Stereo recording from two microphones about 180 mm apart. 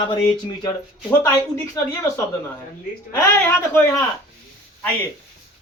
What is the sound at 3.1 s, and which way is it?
Speech, 15° left (ahead or behind).